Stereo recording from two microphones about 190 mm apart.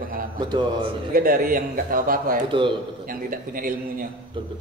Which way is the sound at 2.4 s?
25° right (ahead or behind).